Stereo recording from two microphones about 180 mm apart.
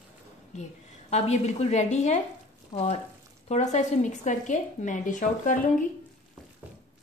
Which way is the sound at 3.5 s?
40° left (ahead or behind).